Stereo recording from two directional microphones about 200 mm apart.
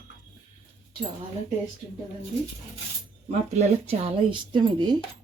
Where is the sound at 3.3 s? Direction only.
30° right (ahead or behind).